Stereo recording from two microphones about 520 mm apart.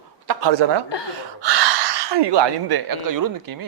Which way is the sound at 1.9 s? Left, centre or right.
Right.